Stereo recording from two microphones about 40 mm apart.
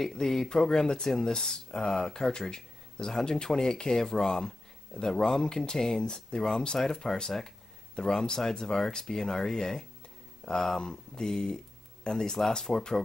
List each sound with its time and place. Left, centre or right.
0.0 s speech: centre